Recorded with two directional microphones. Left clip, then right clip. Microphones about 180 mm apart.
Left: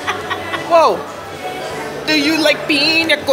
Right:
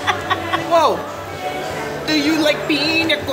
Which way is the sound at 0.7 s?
20° left (ahead or behind).